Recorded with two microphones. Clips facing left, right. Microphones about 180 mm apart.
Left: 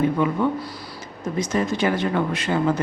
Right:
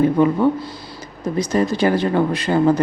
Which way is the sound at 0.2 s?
35° right (ahead or behind).